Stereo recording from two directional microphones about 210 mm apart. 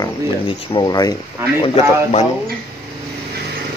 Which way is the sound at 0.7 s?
20° left (ahead or behind).